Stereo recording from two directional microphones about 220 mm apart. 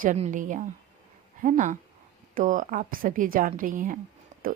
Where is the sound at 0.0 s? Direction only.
35° right (ahead or behind).